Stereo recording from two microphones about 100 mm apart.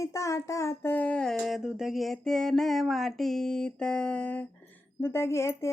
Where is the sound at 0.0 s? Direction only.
30° left (ahead or behind); by 4.4 s 10° left (ahead or behind).